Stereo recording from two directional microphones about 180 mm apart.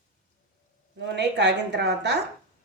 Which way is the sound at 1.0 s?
75° right (ahead or behind).